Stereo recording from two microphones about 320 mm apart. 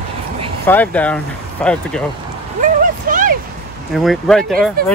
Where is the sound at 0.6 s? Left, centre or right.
Centre.